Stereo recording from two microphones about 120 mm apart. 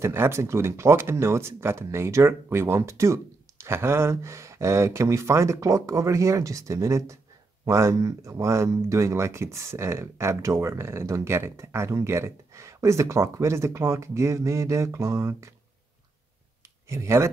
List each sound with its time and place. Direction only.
0.0 s speech: 20° right (ahead or behind)
16.9 s speech: 25° right (ahead or behind)